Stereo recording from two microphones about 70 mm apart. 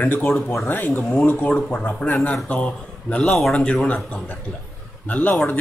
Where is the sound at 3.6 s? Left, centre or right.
Centre.